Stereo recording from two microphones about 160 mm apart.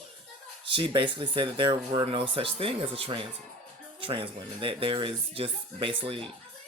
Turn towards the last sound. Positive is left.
turn(degrees=-35)  # may be behind; listen again after turning